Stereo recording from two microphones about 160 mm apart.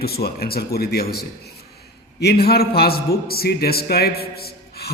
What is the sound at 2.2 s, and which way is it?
A man's voice, 80° left.